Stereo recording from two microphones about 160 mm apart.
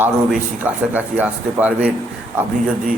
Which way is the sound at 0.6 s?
10° right (ahead or behind).